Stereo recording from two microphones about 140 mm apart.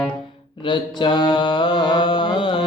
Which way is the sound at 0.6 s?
35° left (ahead or behind).